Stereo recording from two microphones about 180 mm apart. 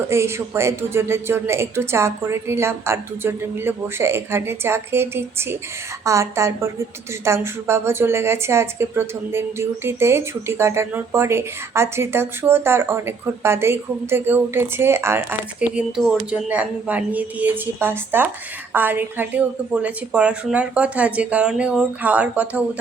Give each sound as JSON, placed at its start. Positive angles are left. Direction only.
{"t": 0.1, "sound": "a woman's voice", "side_deg": -15}